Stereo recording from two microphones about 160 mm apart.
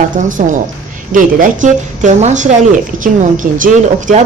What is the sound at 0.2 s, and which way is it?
A woman's voice, 55° right (ahead or behind).